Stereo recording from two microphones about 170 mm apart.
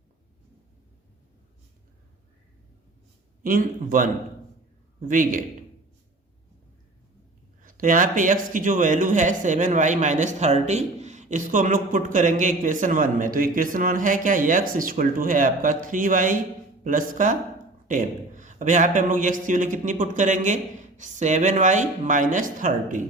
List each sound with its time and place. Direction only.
3.4 s speech: 55° right (ahead or behind)
7.6 s speech: 50° right (ahead or behind)